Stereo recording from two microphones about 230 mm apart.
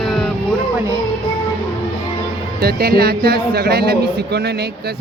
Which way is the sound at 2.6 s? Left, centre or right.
Right.